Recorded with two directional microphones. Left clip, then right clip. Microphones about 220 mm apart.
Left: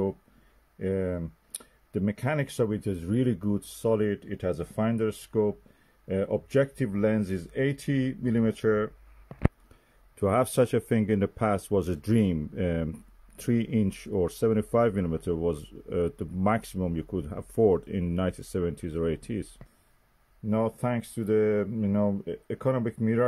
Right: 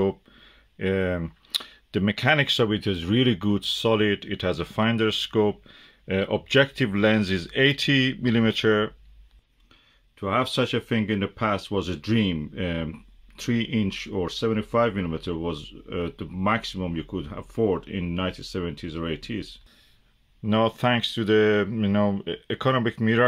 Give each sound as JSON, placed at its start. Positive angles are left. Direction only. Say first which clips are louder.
{"t": 0.7, "sound": "speech", "louder": "right 5 dB", "side_deg": -5}
{"t": 10.1, "sound": "speech", "louder": "even", "side_deg": 35}
{"t": 20.4, "sound": "speech", "louder": "right 6 dB", "side_deg": -10}